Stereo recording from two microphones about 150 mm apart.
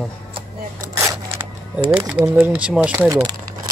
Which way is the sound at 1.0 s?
25° right (ahead or behind).